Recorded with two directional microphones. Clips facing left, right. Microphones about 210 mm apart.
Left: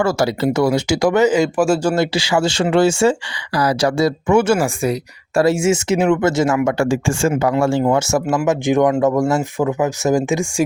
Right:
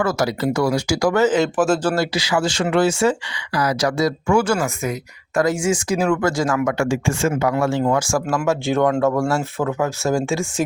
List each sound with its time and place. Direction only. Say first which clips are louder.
0.0 s speech: left 3 dB; 30° left (ahead or behind); by 2.0 s 10° left (ahead or behind)
2.1 s speech: left 3 dB; 25° left (ahead or behind)
6.7 s speech: left 3 dB; 35° left (ahead or behind); by 10.4 s 15° left (ahead or behind)